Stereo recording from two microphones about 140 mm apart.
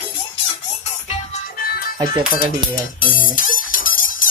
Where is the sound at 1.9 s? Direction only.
30° right (ahead or behind).